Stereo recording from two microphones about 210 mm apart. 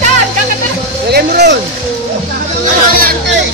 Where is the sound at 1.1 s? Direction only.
50° right (ahead or behind).